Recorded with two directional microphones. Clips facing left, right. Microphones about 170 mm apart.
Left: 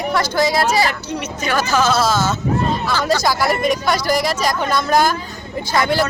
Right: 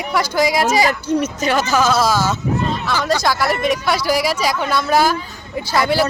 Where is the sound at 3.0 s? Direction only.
Centre (ahead or behind).